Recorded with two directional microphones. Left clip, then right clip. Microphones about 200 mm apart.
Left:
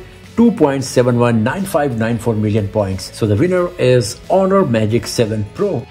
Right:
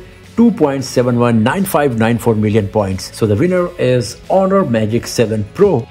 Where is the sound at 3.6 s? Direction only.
5° right (ahead or behind).